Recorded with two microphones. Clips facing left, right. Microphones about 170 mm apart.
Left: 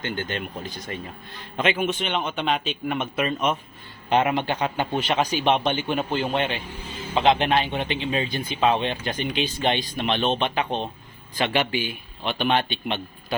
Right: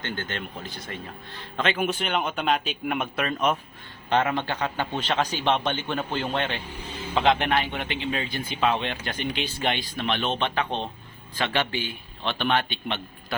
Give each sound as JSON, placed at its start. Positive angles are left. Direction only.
{"t": 0.0, "sound": "a man's voice", "side_deg": 15}
{"t": 1.8, "sound": "speech", "side_deg": 0}
{"t": 4.1, "sound": "a man's voice", "side_deg": 15}